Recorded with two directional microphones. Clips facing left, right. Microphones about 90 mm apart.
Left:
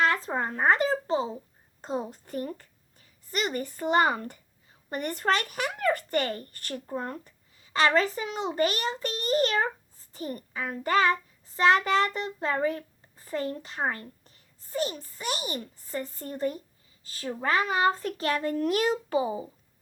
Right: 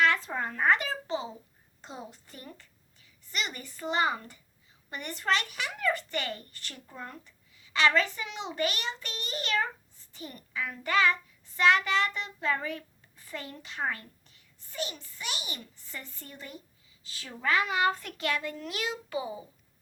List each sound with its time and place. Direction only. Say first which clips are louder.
0.0 s a woman's voice: left 1 dB; 35° left (ahead or behind)